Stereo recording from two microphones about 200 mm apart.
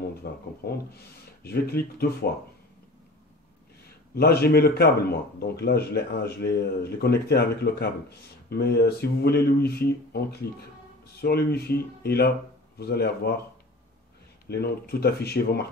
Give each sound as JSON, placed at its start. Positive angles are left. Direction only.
{"t": 0.6, "sound": "a man's voice", "side_deg": 55}
{"t": 4.1, "sound": "a man's voice", "side_deg": 50}
{"t": 14.5, "sound": "a man's voice", "side_deg": 50}